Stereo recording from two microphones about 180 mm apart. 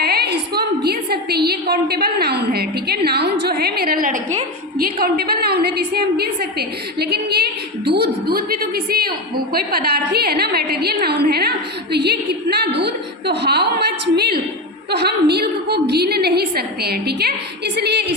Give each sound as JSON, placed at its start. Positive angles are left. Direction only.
{"t": 0.0, "sound": "a woman's voice", "side_deg": -60}